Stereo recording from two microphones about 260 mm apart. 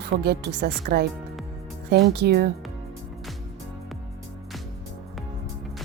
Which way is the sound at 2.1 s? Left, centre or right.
Right.